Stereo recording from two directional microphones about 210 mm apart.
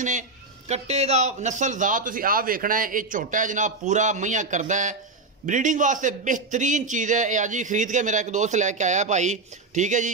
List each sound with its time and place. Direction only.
0.7 s a man's voice: 30° right (ahead or behind)